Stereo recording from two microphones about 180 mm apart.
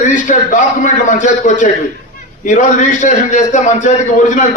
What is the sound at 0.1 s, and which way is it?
A man's voice, 45° left (ahead or behind).